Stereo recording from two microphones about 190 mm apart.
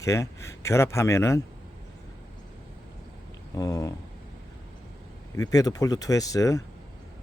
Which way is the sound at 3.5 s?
20° left (ahead or behind).